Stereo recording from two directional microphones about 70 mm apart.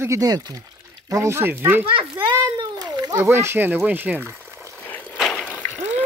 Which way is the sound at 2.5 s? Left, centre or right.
Right.